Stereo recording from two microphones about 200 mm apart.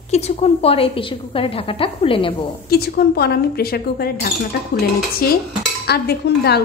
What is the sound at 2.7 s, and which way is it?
A woman's voice, 50° left (ahead or behind).